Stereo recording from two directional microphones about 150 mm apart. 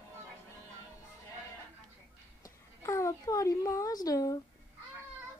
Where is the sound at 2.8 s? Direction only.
20° left (ahead or behind).